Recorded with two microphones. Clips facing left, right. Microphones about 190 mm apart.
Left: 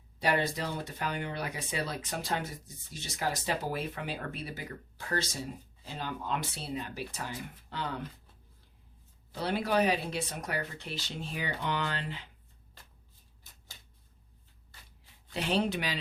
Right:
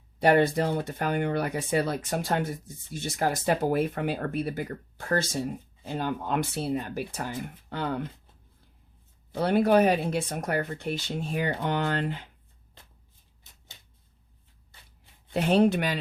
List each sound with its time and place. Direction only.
0.2 s speech: 55° right (ahead or behind)
9.3 s speech: 55° right (ahead or behind)
15.3 s speech: 50° right (ahead or behind)